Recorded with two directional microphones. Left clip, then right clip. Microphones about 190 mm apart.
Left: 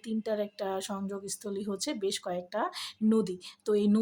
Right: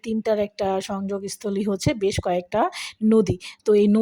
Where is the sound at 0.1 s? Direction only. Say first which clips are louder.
Right 10 dB; 35° right (ahead or behind).